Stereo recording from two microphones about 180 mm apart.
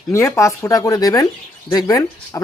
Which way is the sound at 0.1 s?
15° left (ahead or behind).